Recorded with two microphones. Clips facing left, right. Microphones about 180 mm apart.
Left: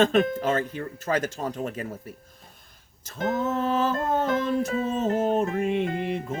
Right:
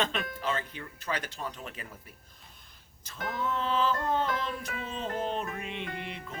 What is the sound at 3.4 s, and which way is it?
Speech, 45° left (ahead or behind).